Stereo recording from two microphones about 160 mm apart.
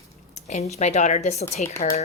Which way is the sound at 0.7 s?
45° left (ahead or behind).